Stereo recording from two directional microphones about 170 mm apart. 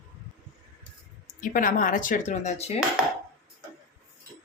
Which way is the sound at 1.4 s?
55° left (ahead or behind).